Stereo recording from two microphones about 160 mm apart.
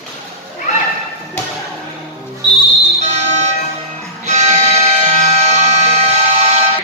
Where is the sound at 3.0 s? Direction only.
45° right (ahead or behind).